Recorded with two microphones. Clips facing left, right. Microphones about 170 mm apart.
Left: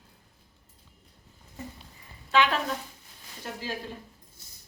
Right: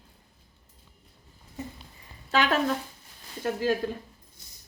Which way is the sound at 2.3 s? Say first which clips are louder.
Left 1 dB; 40° right (ahead or behind).